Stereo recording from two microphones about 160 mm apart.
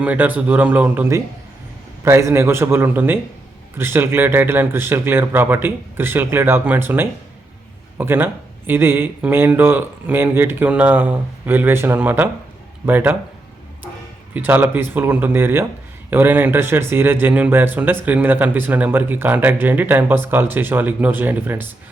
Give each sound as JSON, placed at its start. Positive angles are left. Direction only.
{"t": 0.0, "sound": "speech", "side_deg": -10}
{"t": 14.3, "sound": "speech", "side_deg": -10}